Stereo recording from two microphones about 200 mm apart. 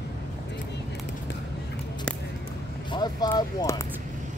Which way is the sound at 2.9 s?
20° left (ahead or behind).